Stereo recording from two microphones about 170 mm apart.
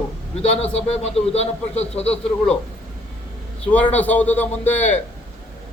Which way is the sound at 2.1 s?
5° left (ahead or behind).